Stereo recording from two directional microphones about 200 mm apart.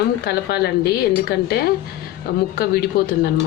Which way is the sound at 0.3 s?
55° left (ahead or behind).